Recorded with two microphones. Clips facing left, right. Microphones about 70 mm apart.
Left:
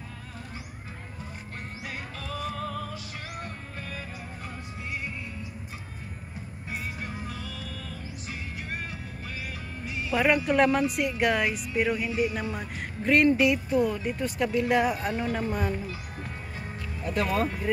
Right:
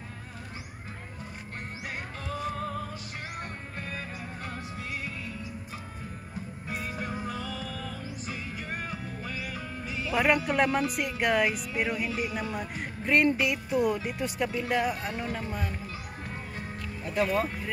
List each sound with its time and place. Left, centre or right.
2.2 s music: right
10.1 s music: centre
13.7 s speech: centre
14.4 s speech: centre
17.1 s speech: centre